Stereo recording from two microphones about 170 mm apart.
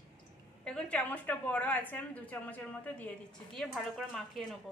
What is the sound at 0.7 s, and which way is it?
A woman's voice, 5° left (ahead or behind).